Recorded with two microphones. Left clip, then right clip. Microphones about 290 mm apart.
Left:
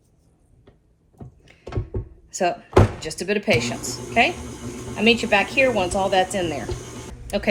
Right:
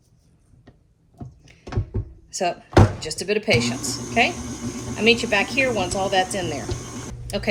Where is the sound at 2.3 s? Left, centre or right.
Left.